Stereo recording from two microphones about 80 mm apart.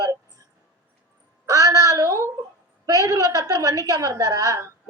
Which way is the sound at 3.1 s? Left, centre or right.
Right.